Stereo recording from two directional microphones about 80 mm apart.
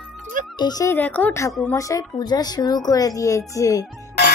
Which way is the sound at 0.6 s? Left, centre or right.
Left.